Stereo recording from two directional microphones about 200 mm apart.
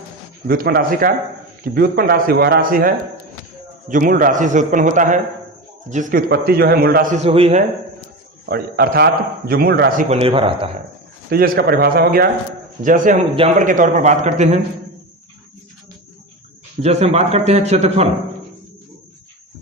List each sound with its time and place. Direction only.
0.4 s a man's voice: 45° right (ahead or behind)
7.3 s speech: 30° right (ahead or behind)
8.4 s a man's voice: 50° right (ahead or behind)
10.1 s speech: 30° right (ahead or behind)
11.3 s a man's voice: 50° right (ahead or behind)
13.3 s speech: 30° right (ahead or behind)
13.7 s a man's voice: 40° right (ahead or behind)
16.8 s a man's voice: 35° right (ahead or behind)